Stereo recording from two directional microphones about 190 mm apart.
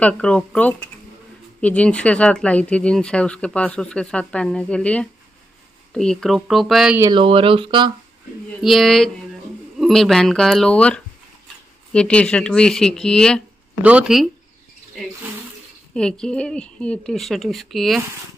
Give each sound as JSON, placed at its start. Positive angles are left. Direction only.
{"t": 0.0, "sound": "speech", "side_deg": 5}
{"t": 7.0, "sound": "speech", "side_deg": -25}
{"t": 8.6, "sound": "speech", "side_deg": 0}
{"t": 15.9, "sound": "speech", "side_deg": 5}